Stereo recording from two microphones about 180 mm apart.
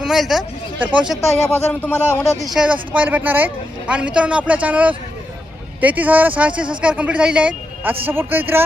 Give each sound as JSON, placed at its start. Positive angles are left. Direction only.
{"t": 0.0, "sound": "speech", "side_deg": 0}
{"t": 1.5, "sound": "speech", "side_deg": 10}
{"t": 2.4, "sound": "speech", "side_deg": 0}